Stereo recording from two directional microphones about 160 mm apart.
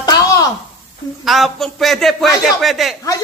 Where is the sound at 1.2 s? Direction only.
Centre (ahead or behind).